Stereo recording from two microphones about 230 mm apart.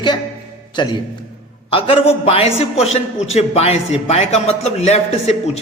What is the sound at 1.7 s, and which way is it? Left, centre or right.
A man's voice, left.